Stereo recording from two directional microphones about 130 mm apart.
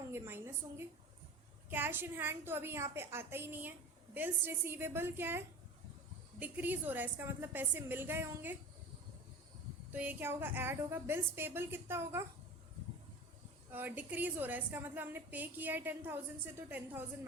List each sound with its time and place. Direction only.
0.1 s a woman's voice: 20° right (ahead or behind)
6.4 s a woman's voice: 15° right (ahead or behind)
9.9 s a woman's voice: 15° right (ahead or behind)
13.7 s a woman's voice: 15° right (ahead or behind)